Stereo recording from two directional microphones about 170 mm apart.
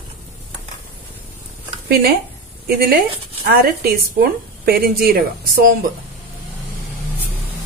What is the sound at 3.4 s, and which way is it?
Speech, 60° right (ahead or behind).